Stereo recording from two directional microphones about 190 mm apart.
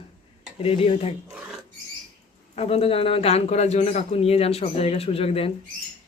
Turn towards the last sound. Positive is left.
turn(degrees=30)  # may be behind; listen again after turning